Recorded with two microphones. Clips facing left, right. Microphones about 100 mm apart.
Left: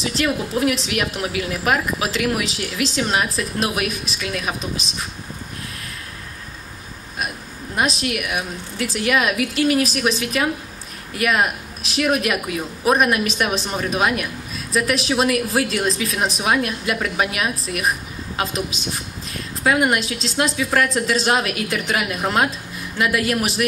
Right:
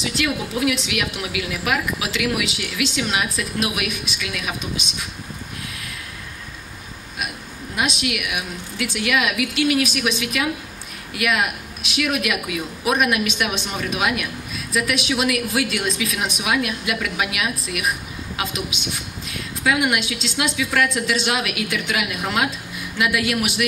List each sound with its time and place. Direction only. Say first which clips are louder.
0.0 s speech: left 2 dB; 35° left (ahead or behind)
7.7 s speech: left 2 dB; 40° left (ahead or behind)